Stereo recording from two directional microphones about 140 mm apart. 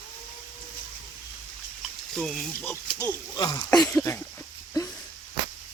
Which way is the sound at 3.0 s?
30° left (ahead or behind).